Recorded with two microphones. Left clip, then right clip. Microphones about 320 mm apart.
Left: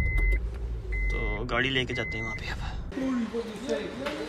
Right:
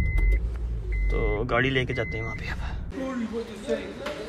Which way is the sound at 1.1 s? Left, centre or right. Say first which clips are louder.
Right 6 dB; centre.